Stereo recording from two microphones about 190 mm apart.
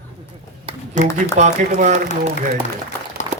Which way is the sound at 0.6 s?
40° right (ahead or behind).